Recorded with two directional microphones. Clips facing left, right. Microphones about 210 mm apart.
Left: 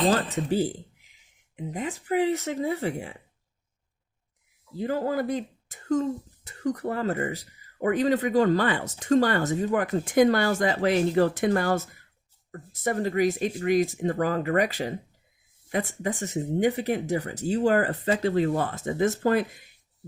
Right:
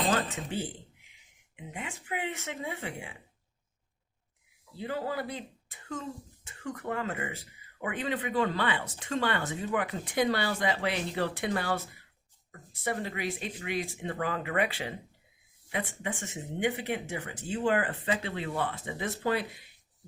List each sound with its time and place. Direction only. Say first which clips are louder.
0.1 s speech: left 6 dB; 40° left (ahead or behind)
4.7 s speech: left 7 dB; 45° left (ahead or behind)